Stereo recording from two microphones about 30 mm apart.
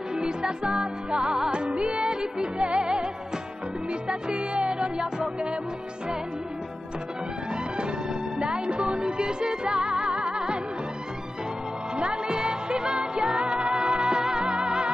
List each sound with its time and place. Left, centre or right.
0.1 s music: right
4.1 s music: right
8.6 s music: right
10.3 s music: right
12.0 s music: right